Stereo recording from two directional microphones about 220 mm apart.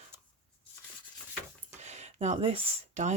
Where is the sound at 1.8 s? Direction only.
30° right (ahead or behind).